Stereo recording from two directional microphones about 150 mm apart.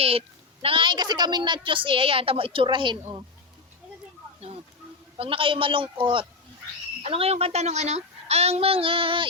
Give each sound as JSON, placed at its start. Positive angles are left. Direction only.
{"t": 0.0, "sound": "a woman's voice", "side_deg": -40}
{"t": 5.1, "sound": "a woman's voice", "side_deg": -40}